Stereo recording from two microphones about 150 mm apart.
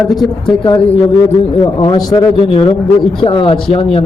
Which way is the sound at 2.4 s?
40° left (ahead or behind).